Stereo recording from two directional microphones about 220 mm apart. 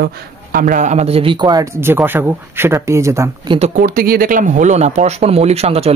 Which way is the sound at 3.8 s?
40° right (ahead or behind).